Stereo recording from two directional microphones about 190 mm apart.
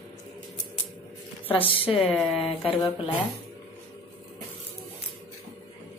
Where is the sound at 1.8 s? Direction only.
30° left (ahead or behind).